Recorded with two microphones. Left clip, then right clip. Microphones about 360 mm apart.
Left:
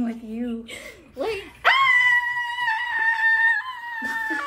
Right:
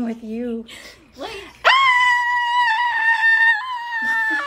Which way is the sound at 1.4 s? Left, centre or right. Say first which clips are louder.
Right 4 dB; right.